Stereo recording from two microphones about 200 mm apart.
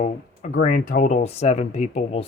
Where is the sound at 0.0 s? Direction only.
40° left (ahead or behind).